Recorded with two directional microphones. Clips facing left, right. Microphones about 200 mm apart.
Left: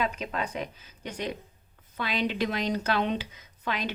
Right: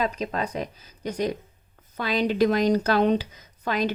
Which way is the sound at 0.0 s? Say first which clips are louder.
Right 4 dB; 40° right (ahead or behind).